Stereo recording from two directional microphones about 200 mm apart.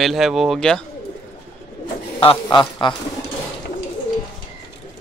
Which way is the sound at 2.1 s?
20° left (ahead or behind).